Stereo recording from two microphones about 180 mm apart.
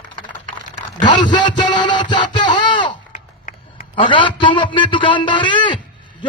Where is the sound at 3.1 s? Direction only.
45° left (ahead or behind).